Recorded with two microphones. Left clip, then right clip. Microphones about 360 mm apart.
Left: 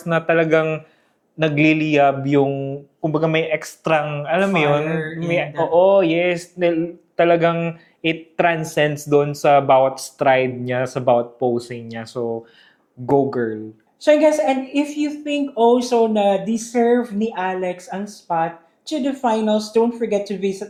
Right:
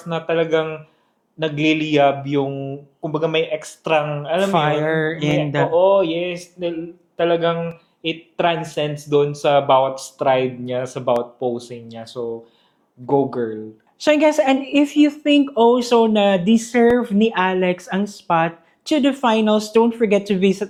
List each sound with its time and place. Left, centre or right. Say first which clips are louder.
0.1 s speech: left 3 dB; centre
4.9 s mantra: right 5 dB; right
5.7 s a sound: left 2 dB; centre
7.2 s speech: left 2 dB; centre
14.0 s a woman's voice: left 1 dB; right